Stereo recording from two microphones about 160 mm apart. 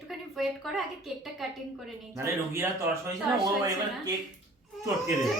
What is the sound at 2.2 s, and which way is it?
Speech, 15° right (ahead or behind).